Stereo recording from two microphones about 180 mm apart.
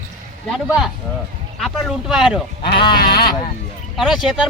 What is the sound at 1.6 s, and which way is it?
Speech, centre (ahead or behind).